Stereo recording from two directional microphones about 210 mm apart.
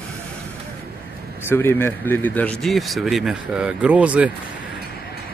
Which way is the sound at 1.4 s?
10° left (ahead or behind).